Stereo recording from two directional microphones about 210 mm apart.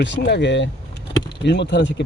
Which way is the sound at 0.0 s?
60° left (ahead or behind).